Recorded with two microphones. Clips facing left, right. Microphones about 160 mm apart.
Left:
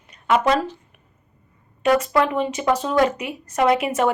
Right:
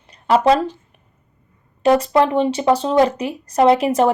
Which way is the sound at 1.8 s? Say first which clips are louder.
Right 4 dB; 30° right (ahead or behind).